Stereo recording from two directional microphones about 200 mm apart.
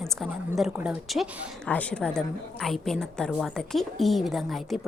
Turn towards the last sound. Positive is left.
turn(degrees=0)  # may be behind; listen again after turning